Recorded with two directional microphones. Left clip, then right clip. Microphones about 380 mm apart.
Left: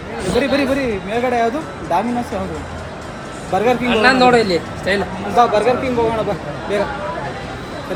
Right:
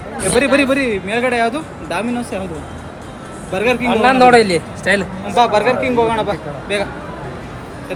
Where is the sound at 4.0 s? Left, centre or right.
Centre.